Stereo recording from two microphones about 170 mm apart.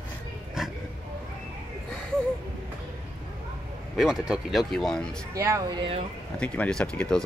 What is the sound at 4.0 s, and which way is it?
Speech, 5° right (ahead or behind).